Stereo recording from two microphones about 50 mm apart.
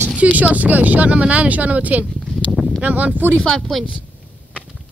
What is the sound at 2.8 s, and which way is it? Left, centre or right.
Speech, right.